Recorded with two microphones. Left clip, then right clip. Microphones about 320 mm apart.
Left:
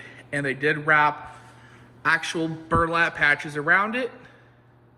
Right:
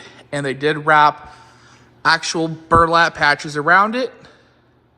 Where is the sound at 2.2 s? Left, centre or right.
Right.